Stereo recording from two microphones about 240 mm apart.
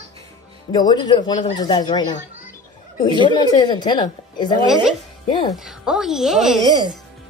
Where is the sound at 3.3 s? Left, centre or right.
Centre.